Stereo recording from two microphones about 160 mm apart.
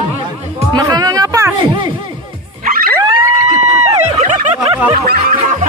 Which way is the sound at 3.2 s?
50° right (ahead or behind).